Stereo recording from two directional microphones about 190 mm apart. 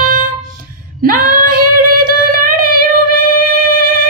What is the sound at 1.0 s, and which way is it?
Female singing, 50° right (ahead or behind).